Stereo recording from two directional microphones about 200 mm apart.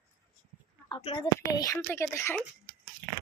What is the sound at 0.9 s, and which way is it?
A woman's voice, 25° left (ahead or behind).